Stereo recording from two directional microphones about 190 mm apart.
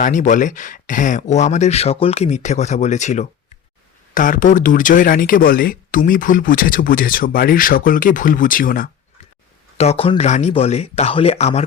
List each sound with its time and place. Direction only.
0.0 s speech: 40° left (ahead or behind)
9.7 s speech: 35° left (ahead or behind)